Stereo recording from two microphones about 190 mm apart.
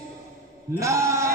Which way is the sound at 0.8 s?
15° right (ahead or behind).